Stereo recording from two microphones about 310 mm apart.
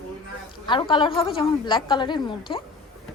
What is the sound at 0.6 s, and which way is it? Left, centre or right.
A woman's voice, centre.